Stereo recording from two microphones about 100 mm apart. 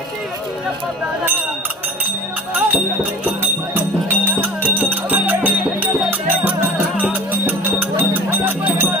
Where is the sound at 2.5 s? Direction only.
20° right (ahead or behind).